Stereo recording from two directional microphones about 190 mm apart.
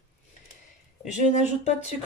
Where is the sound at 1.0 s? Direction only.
40° left (ahead or behind).